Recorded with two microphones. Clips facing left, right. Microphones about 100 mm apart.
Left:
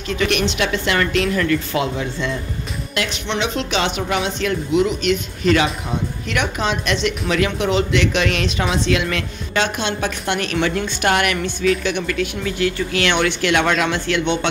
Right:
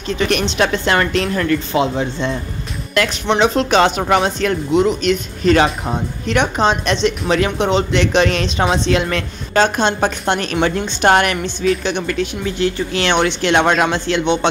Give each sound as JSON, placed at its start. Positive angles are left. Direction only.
{"t": 0.1, "sound": "speech", "side_deg": -35}
{"t": 1.7, "sound": "speech", "side_deg": -25}
{"t": 2.9, "sound": "speech", "side_deg": -45}